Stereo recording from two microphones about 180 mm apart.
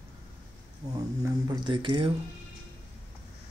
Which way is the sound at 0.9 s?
20° right (ahead or behind).